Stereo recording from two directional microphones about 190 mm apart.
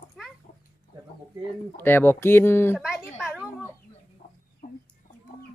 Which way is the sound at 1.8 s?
10° left (ahead or behind).